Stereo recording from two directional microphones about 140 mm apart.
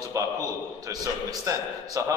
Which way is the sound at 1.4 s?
25° right (ahead or behind).